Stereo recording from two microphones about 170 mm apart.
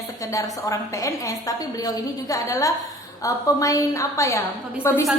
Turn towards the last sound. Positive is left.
turn(degrees=15)  # may be behind; listen again after turning